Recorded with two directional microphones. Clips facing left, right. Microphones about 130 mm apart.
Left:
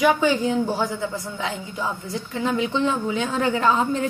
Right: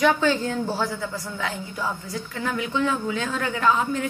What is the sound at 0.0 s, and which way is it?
A woman's voice, 10° left (ahead or behind).